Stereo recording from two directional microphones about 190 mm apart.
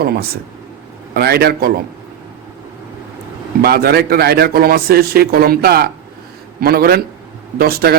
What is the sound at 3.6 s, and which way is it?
A man's voice, 55° right (ahead or behind).